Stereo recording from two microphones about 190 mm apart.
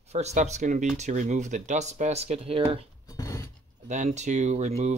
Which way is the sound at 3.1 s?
15° left (ahead or behind).